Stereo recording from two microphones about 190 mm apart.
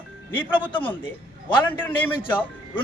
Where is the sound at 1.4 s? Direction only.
25° left (ahead or behind).